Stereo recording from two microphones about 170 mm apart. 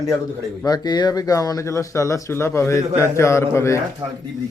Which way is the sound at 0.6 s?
25° left (ahead or behind).